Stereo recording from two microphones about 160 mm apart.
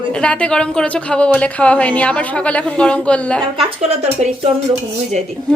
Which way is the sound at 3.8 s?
45° right (ahead or behind).